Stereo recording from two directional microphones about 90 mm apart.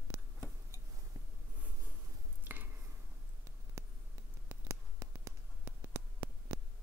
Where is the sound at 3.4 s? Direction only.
35° right (ahead or behind).